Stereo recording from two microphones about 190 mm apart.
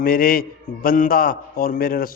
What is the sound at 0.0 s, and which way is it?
A man's voice, 50° left (ahead or behind).